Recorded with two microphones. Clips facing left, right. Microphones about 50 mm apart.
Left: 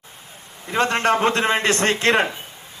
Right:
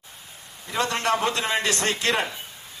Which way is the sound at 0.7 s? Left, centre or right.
Left.